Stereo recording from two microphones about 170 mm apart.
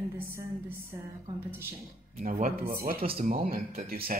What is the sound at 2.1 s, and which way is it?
Speech, 55° right (ahead or behind).